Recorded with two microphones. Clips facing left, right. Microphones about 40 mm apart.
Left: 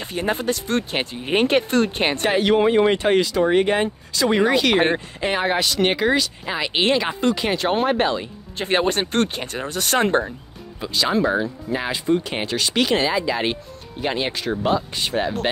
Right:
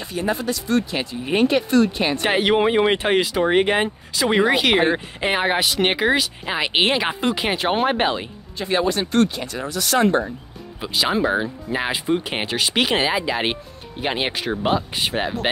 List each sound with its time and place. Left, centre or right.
0.0 s speech: left
2.2 s speech: right
8.5 s speech: left
10.8 s speech: centre